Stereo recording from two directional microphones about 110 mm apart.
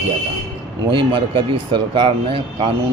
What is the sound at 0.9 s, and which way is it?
Speech, 50° right (ahead or behind).